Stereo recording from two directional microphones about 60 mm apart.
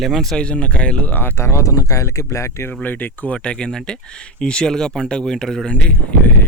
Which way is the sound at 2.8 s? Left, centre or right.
Left.